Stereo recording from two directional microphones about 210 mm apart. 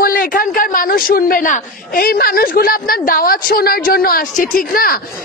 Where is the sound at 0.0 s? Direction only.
45° left (ahead or behind).